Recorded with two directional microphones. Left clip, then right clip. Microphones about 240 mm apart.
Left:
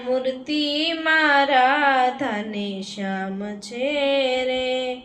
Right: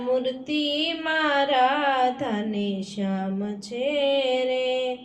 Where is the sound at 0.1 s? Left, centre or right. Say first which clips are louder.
Left 2 dB; centre.